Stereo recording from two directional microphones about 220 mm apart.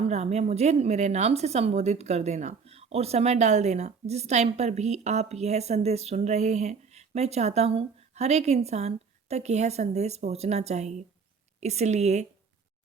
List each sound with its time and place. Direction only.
0.0 s speech: 30° right (ahead or behind)